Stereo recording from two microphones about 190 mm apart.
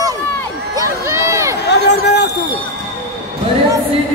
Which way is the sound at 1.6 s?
65° left (ahead or behind).